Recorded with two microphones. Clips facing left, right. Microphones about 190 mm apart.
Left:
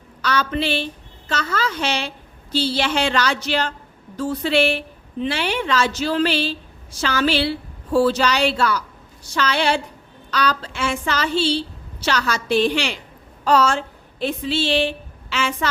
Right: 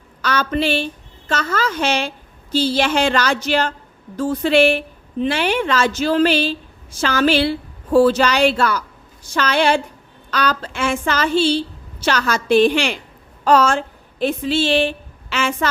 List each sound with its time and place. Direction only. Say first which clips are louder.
0.2 s a woman's voice: right 2 dB; 50° right (ahead or behind)